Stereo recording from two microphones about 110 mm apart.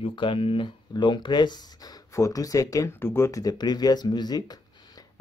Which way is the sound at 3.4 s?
40° left (ahead or behind).